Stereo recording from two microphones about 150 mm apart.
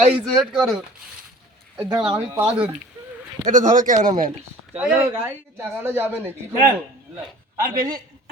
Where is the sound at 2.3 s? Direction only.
15° right (ahead or behind).